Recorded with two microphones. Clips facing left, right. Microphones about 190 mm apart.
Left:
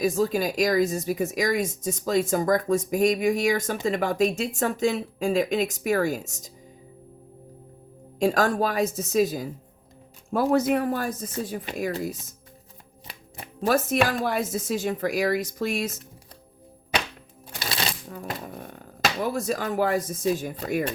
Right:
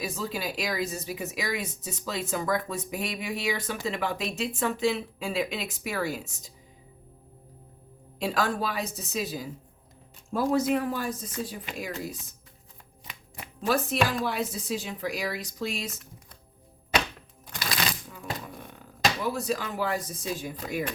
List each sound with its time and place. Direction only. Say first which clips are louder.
0.0 s speech: left 9 dB; 45° left (ahead or behind)
8.2 s speech: left 6 dB; 45° left (ahead or behind)
10.3 s speech: left 3 dB; 65° left (ahead or behind)
11.9 s speech: left 7 dB; 40° left (ahead or behind)
13.1 s shuffling cards: left 2 dB; 35° left (ahead or behind)
13.7 s speech: left 4 dB; 50° left (ahead or behind)
17.6 s shuffling cards: left 1 dB; 30° left (ahead or behind)
18.1 s speech: left 3 dB; 45° left (ahead or behind)